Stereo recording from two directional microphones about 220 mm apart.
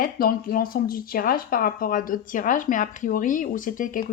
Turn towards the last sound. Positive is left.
turn(degrees=35)  # may be behind; listen again after turning